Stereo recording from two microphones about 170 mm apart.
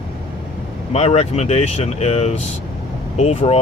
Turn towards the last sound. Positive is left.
turn(degrees=35)  # may be behind; listen again after turning